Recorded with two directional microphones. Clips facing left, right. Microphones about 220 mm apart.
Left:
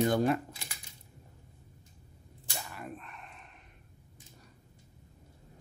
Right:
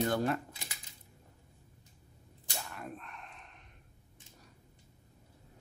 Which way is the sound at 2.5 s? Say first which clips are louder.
Left 1 dB; 5° left (ahead or behind).